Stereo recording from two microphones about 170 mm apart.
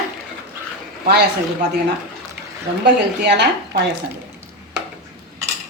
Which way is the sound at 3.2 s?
80° right.